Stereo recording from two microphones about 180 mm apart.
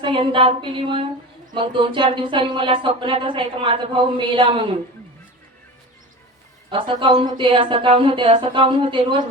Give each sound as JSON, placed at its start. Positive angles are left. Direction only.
{"t": 0.0, "sound": "speech", "side_deg": -30}
{"t": 6.7, "sound": "speech", "side_deg": -30}